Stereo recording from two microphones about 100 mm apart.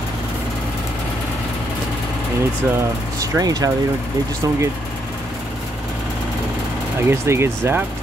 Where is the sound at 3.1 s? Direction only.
40° right (ahead or behind).